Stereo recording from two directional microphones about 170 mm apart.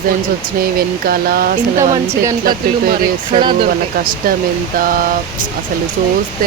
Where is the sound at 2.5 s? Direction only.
55° right (ahead or behind).